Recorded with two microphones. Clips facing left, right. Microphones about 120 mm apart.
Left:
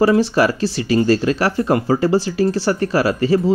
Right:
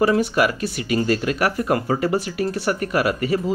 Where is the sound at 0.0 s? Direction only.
30° left (ahead or behind).